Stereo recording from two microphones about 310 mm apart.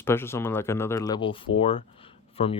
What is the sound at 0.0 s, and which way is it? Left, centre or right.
Speech, centre.